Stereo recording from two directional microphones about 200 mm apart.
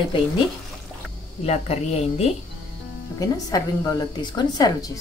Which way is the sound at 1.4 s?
30° left (ahead or behind).